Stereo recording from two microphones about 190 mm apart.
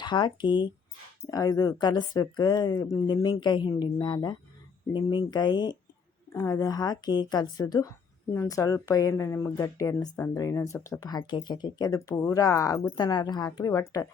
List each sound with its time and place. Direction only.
0.0 s a woman's voice: 25° left (ahead or behind)